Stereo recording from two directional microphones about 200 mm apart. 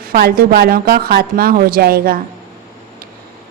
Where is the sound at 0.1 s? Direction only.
50° right (ahead or behind).